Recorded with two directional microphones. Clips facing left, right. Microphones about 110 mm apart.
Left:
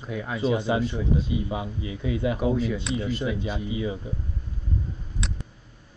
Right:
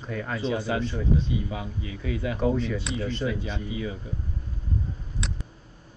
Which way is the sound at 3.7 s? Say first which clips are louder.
Left 3 dB; 20° left (ahead or behind).